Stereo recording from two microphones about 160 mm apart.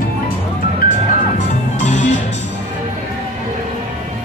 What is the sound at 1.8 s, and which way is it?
Music, 50° left (ahead or behind).